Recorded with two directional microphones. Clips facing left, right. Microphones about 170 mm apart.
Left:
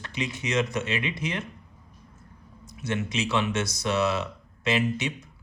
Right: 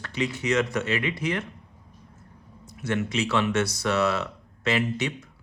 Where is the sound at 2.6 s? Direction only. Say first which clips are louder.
Right 2 dB; 20° left (ahead or behind).